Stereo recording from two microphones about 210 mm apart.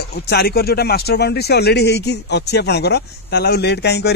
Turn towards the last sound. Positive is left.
turn(degrees=50)  # may be behind; listen again after turning